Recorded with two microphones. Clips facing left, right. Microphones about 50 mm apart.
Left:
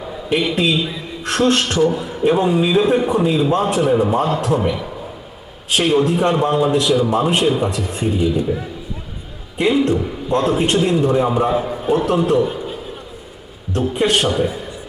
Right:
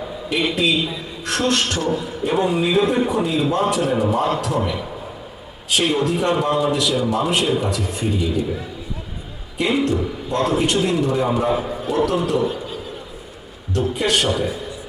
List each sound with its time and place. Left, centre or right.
0.5 s a man's voice: left
5.7 s a man's voice: left
9.6 s a man's voice: left
11.4 s a man's voice: centre
11.9 s a man's voice: left
13.7 s a man's voice: left